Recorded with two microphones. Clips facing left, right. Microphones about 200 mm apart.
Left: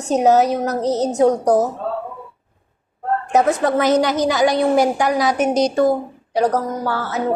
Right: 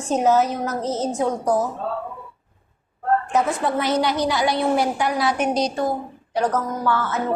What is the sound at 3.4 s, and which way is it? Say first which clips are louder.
A woman's voice: left 5 dB; 40° left (ahead or behind).